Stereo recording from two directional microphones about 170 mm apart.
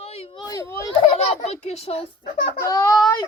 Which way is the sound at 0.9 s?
40° left (ahead or behind).